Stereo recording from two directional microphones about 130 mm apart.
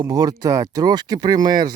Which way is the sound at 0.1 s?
30° right (ahead or behind).